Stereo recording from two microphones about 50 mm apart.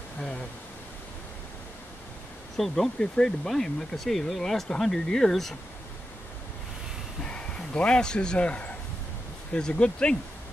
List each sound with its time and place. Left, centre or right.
2.5 s speech: centre
7.2 s a man's voice: left